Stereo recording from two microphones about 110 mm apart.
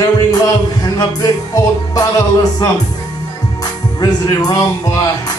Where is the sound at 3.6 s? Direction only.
35° left (ahead or behind).